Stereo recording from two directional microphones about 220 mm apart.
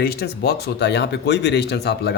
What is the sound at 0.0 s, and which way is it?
Speech, 45° left (ahead or behind).